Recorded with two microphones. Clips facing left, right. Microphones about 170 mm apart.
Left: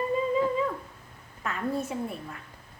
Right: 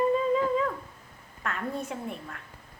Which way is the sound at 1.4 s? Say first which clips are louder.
Left 3 dB; 5° left (ahead or behind).